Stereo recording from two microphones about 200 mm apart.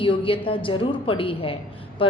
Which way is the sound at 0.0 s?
25° left (ahead or behind).